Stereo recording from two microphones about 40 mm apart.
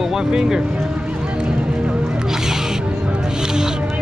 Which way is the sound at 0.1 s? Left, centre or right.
Centre.